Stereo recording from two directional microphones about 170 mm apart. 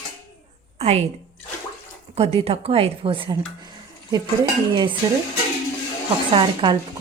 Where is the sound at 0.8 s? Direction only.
35° right (ahead or behind).